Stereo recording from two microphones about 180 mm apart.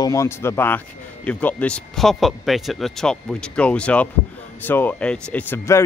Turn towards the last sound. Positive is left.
turn(degrees=15)  # may be behind; listen again after turning